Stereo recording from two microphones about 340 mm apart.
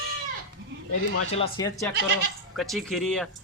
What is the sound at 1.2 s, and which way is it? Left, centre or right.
Speech, centre.